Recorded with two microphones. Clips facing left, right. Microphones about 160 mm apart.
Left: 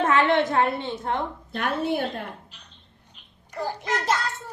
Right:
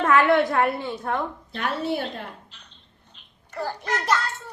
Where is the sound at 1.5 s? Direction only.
50° left (ahead or behind).